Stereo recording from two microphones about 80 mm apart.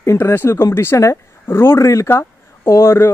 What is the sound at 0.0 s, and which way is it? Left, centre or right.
Speech, left.